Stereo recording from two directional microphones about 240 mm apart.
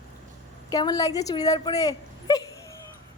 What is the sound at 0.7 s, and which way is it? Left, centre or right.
A woman's voice, centre.